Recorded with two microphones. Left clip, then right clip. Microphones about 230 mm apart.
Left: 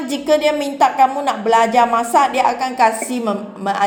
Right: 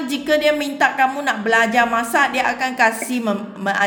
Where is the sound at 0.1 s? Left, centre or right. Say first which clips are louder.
Left 2 dB; centre.